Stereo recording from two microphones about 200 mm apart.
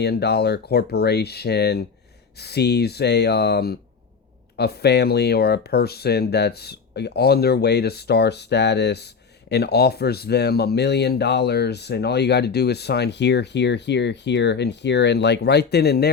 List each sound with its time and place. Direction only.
0.0 s speech: 55° left (ahead or behind)